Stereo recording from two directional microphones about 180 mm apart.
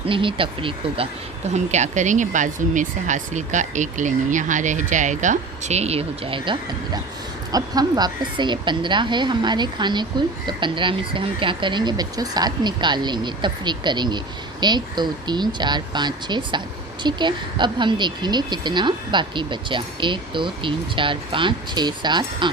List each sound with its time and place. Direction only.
0.1 s a woman's voice: 30° right (ahead or behind)
1.5 s a woman's voice: 40° right (ahead or behind)